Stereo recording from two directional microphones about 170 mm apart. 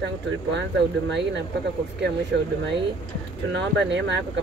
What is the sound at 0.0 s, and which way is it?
Speech, 90° right.